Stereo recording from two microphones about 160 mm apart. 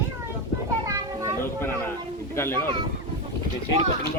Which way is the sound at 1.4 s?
15° left (ahead or behind).